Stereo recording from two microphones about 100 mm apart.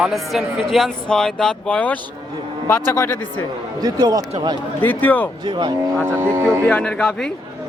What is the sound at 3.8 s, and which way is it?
Speech, 40° right (ahead or behind).